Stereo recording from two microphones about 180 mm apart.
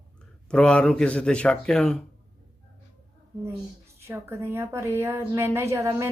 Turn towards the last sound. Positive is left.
turn(degrees=-15)  # may be behind; listen again after turning